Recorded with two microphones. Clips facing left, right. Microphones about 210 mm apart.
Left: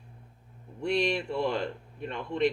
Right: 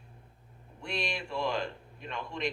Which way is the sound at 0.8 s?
65° left (ahead or behind).